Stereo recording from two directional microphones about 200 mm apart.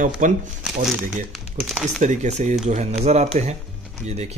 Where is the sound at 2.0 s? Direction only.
35° right (ahead or behind).